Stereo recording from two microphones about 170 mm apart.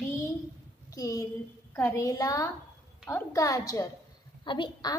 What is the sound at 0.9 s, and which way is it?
A woman's voice, 20° left (ahead or behind).